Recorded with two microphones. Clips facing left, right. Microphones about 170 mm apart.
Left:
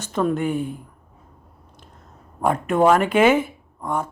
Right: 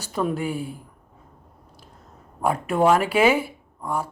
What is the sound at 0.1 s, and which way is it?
Speech, 10° right (ahead or behind).